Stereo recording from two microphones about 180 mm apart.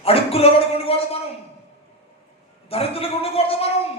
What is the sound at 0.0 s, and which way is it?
A man's voice, 35° left (ahead or behind).